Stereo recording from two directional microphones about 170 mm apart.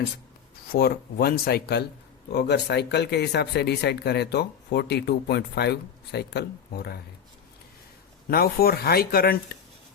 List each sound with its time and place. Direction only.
0.7 s speech: 65° left (ahead or behind)
2.3 s speech: 85° left; by 7.0 s 70° left (ahead or behind)
8.3 s speech: 65° left (ahead or behind)